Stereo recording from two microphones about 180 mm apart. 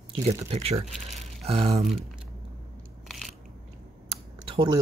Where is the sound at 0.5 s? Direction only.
35° right (ahead or behind).